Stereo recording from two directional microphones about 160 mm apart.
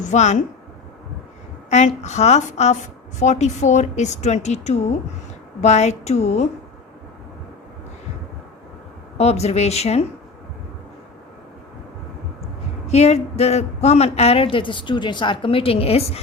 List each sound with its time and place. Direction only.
0.0 s a woman's voice: 50° left (ahead or behind)
1.7 s a woman's voice: 45° left (ahead or behind)
9.1 s a woman's voice: 40° left (ahead or behind)
12.9 s a woman's voice: 40° left (ahead or behind)